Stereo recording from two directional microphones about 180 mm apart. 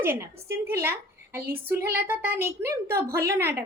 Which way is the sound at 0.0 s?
15° right (ahead or behind).